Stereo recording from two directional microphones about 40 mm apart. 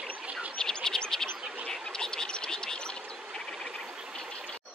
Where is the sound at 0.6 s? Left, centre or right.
Centre.